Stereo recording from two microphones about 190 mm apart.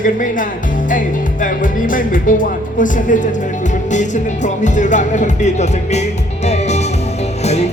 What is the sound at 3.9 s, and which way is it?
Speech, 40° left (ahead or behind).